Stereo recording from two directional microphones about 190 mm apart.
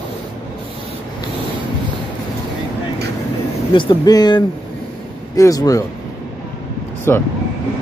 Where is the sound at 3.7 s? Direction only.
20° left (ahead or behind).